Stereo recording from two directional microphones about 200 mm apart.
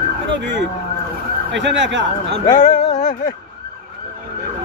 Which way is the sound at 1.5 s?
65° right (ahead or behind).